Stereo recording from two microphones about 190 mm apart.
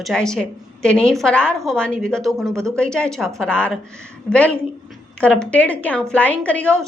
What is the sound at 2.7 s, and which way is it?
A woman's voice, 5° left (ahead or behind).